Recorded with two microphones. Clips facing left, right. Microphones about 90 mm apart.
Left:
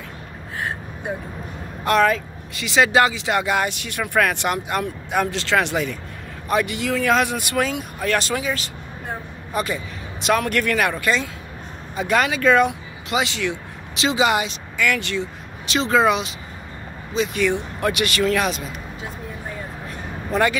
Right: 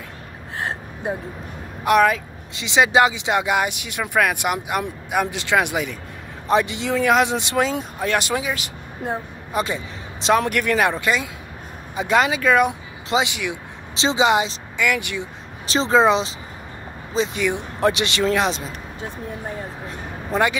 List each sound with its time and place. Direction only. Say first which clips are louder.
1.9 s speech: right 1 dB; 10° right (ahead or behind)
6.4 s speech: right 2 dB; 25° right (ahead or behind)
15.6 s speech: right 2 dB; 30° right (ahead or behind)
17.4 s speech: left 2 dB; 15° right (ahead or behind)
17.7 s speech: right 1 dB; 30° right (ahead or behind)
20.2 s speech: even; 15° right (ahead or behind)